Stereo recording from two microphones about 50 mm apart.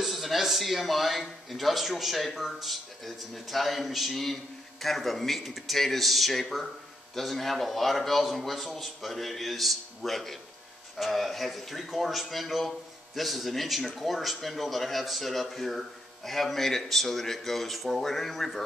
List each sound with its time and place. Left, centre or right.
0.0 s a man's voice: centre